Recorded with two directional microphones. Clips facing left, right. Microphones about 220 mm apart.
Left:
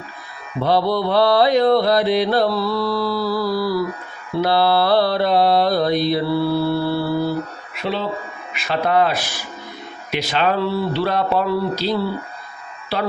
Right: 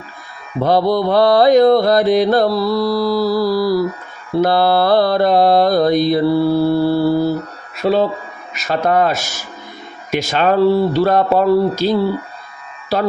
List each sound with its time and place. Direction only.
0.6 s mantra: 45° right (ahead or behind)
7.8 s speech: 45° right (ahead or behind)
8.5 s mantra: 45° right (ahead or behind)
12.9 s speech: 40° right (ahead or behind)